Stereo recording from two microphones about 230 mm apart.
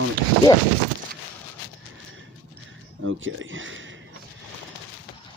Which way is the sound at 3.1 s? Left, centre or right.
Right.